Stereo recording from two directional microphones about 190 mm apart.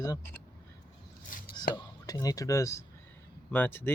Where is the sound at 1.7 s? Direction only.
20° left (ahead or behind).